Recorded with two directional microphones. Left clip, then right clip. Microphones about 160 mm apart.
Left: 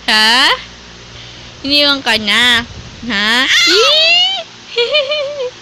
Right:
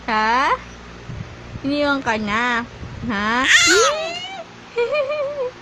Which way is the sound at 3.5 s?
20° right (ahead or behind).